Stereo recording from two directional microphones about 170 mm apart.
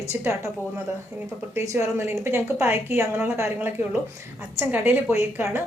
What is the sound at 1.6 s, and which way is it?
A woman's voice, 15° right (ahead or behind).